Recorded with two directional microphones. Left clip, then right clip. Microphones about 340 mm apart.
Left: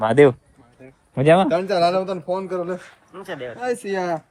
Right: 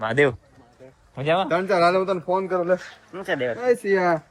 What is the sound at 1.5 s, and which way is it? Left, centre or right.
A man's voice, centre.